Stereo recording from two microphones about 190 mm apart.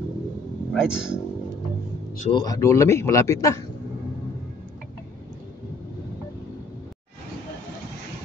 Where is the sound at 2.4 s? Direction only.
15° left (ahead or behind).